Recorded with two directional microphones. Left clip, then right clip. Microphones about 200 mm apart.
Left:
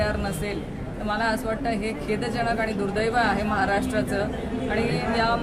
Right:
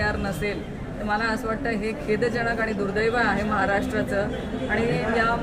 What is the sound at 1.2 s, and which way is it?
Speech, 10° left (ahead or behind).